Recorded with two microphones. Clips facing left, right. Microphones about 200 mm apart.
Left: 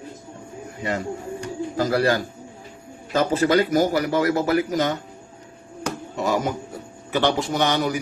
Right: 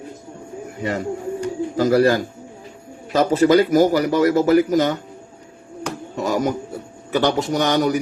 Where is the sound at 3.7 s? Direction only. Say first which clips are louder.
Right 4 dB; 45° right (ahead or behind).